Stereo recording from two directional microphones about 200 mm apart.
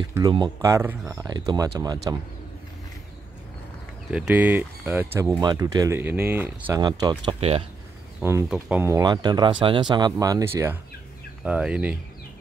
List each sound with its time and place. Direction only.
0.3 s speech: 20° right (ahead or behind)
4.1 s speech: 5° right (ahead or behind)
6.6 s speech: 20° right (ahead or behind)
8.2 s speech: 15° right (ahead or behind)